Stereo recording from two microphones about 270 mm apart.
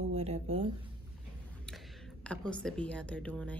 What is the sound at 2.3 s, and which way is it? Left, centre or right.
A woman's voice, centre.